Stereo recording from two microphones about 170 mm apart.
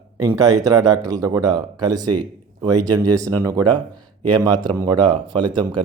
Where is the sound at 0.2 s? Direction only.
20° right (ahead or behind).